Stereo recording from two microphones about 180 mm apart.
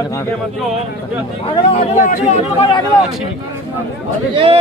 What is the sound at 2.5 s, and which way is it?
Speech, 30° left (ahead or behind).